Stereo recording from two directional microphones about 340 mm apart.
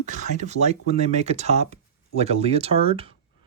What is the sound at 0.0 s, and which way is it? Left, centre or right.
Speech, right.